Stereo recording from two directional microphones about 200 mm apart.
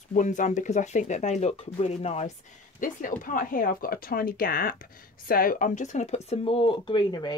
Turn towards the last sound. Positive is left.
turn(degrees=20)  # may be behind; listen again after turning